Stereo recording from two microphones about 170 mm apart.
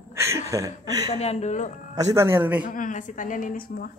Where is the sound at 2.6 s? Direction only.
50° left (ahead or behind).